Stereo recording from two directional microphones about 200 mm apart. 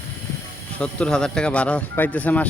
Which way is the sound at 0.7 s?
5° left (ahead or behind).